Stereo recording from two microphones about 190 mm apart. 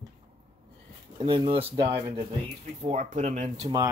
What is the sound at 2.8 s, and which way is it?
Speech, 40° right (ahead or behind).